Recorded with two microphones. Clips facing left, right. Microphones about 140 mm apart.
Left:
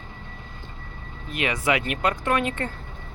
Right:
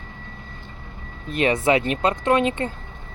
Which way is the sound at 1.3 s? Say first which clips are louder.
Right 5 dB; 30° right (ahead or behind).